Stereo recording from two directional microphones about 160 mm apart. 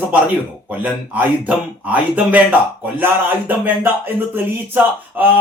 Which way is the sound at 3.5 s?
10° right (ahead or behind).